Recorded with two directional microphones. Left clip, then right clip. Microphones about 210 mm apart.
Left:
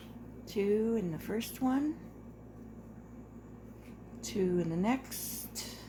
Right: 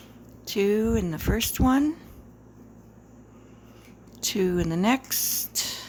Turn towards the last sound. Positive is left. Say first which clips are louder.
# right 14 dB
turn(degrees=-30)  # may be behind; listen again after turning